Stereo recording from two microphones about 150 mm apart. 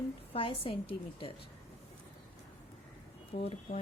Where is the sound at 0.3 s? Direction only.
40° left (ahead or behind).